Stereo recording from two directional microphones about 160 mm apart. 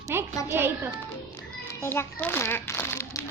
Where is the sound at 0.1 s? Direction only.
15° right (ahead or behind).